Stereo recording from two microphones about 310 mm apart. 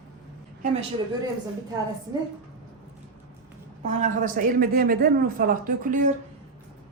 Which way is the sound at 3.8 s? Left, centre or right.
Right.